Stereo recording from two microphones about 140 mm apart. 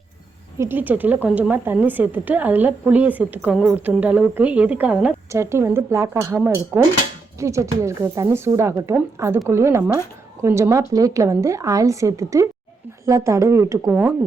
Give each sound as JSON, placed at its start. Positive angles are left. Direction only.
{"t": 0.6, "sound": "a woman's voice", "side_deg": -15}
{"t": 5.3, "sound": "speech", "side_deg": -20}